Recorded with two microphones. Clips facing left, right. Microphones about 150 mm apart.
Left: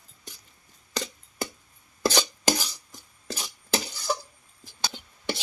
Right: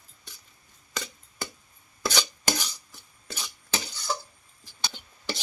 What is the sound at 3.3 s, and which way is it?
Stir, 35° left (ahead or behind).